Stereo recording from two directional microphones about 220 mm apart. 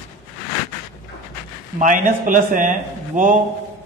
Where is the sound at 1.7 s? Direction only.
35° right (ahead or behind).